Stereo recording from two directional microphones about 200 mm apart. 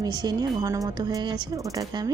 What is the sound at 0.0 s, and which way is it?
Speech, 20° right (ahead or behind).